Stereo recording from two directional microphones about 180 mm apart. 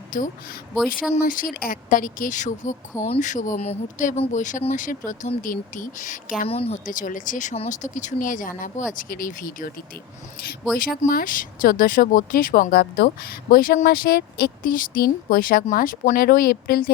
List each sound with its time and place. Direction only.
0.1 s speech: 50° left (ahead or behind)
6.5 s speech: 35° left (ahead or behind); by 9.7 s 50° left (ahead or behind)
10.8 s speech: 50° left (ahead or behind)